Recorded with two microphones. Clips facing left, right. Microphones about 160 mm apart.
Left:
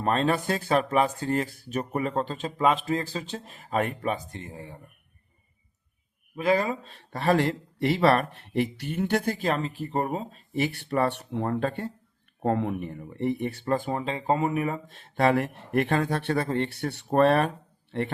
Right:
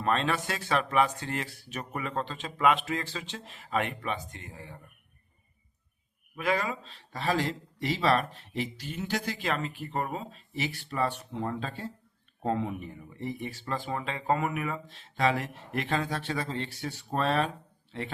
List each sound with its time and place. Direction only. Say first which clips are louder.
0.0 s speech: left 4 dB; 40° left (ahead or behind)
6.3 s speech: left 5 dB; 30° left (ahead or behind)
6.8 s speech: left 6 dB; 55° left (ahead or behind); by 10.2 s 35° left (ahead or behind)
10.5 s speech: left 8 dB; 55° left (ahead or behind)
13.9 s speech: left 3 dB; 35° left (ahead or behind)
14.8 s speech: left 4 dB; 55° left (ahead or behind)